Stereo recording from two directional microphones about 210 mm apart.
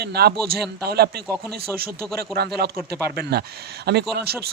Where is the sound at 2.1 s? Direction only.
50° right (ahead or behind).